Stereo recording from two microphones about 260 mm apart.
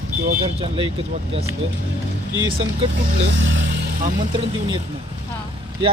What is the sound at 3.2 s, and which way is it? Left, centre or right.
Speech, right.